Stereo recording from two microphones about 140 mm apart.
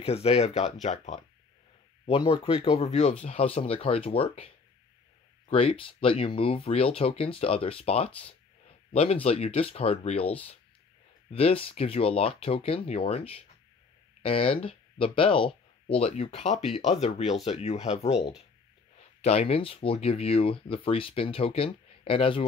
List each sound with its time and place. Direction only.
0.0 s speech: 45° left (ahead or behind)
2.0 s speech: 40° left (ahead or behind)